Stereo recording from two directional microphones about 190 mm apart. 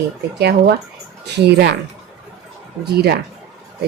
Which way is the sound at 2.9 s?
55° right (ahead or behind).